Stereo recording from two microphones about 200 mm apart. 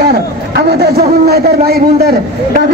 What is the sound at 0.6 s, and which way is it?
A man's voice, 50° right (ahead or behind).